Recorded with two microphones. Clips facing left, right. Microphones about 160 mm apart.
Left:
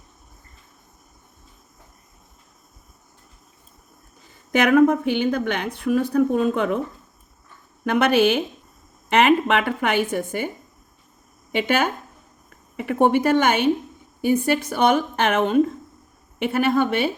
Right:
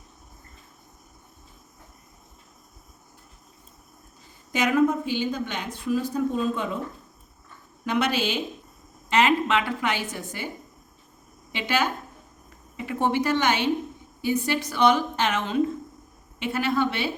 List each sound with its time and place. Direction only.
4.5 s speech: 60° left (ahead or behind)
7.9 s speech: 55° left (ahead or behind)
11.5 s speech: 55° left (ahead or behind)